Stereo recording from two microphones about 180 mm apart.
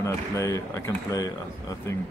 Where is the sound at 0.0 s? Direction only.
15° left (ahead or behind).